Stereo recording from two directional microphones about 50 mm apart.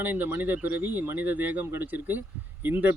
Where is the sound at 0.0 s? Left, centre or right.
Right.